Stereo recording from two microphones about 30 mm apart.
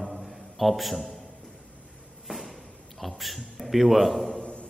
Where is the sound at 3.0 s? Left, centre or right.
Centre.